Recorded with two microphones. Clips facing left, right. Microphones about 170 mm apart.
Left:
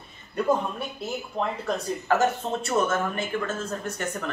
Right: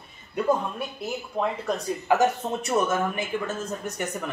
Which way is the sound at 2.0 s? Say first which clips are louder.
Right 2 dB; 15° right (ahead or behind).